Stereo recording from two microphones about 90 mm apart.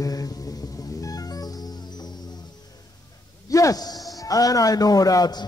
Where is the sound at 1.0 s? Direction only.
45° left (ahead or behind).